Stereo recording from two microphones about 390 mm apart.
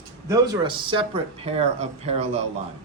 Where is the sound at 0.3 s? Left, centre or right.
Centre.